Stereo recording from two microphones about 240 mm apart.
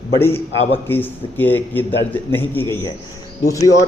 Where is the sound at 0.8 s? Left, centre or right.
Centre.